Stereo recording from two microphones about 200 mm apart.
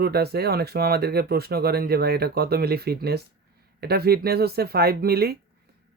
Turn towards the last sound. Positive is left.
turn(degrees=-50)  # may be behind; listen again after turning